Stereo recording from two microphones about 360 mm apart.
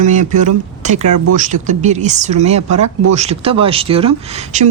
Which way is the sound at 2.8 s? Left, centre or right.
Right.